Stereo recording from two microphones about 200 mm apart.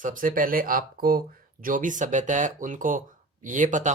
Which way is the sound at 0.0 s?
40° right (ahead or behind).